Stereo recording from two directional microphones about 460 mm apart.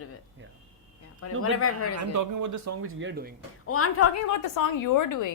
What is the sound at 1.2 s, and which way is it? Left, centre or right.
Speech, left.